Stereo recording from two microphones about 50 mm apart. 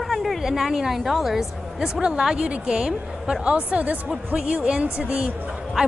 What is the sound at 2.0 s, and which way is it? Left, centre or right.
A woman's voice, centre.